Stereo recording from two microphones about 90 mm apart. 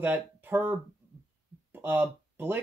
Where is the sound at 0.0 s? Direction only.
20° right (ahead or behind).